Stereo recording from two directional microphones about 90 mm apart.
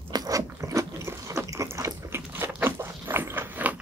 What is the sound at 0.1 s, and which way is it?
Biting, 40° right (ahead or behind).